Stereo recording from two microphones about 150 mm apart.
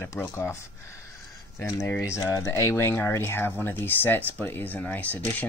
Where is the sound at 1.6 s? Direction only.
20° left (ahead or behind).